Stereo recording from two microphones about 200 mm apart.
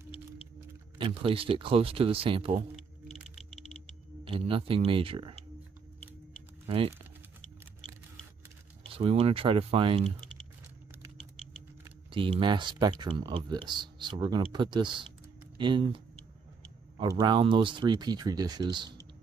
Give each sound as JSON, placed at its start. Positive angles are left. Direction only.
{"t": 0.9, "sound": "speech", "side_deg": -25}
{"t": 4.2, "sound": "speech", "side_deg": -25}
{"t": 8.8, "sound": "speech", "side_deg": -30}
{"t": 12.1, "sound": "speech", "side_deg": -25}
{"t": 17.0, "sound": "speech", "side_deg": -20}